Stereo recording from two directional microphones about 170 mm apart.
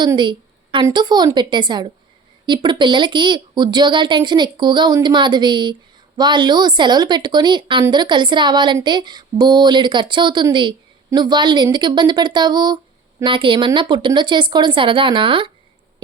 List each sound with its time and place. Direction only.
0.0 s a woman's voice: 25° right (ahead or behind)